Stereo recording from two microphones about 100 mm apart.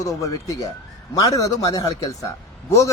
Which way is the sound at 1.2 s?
35° left (ahead or behind).